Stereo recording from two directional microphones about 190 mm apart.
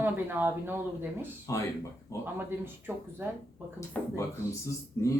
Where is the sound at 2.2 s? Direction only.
10° right (ahead or behind).